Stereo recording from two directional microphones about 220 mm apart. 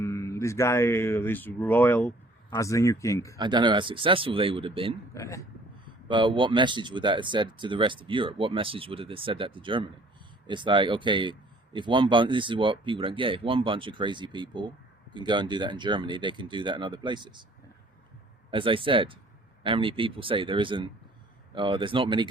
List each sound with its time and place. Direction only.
0.0 s speech: 15° left (ahead or behind)
3.3 s a man's voice: 20° right (ahead or behind)
5.1 s speech: 15° left (ahead or behind)
5.8 s a man's voice: 20° right (ahead or behind)
18.5 s a man's voice: 25° right (ahead or behind)